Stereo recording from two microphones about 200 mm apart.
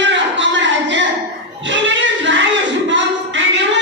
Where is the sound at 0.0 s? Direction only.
65° right (ahead or behind).